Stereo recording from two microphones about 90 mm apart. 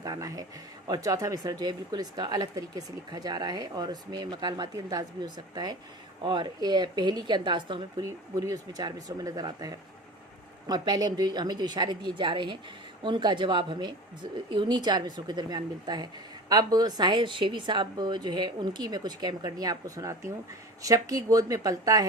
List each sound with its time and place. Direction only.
0.0 s speech: 40° right (ahead or behind); by 8.0 s 65° right (ahead or behind)
8.0 s speech: 40° right (ahead or behind)